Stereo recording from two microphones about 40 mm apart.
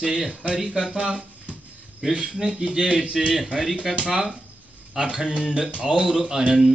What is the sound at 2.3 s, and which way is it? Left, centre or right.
A man's voice, centre.